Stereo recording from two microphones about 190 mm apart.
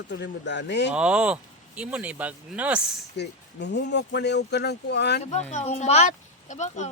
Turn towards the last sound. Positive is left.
turn(degrees=40)  # may be behind; listen again after turning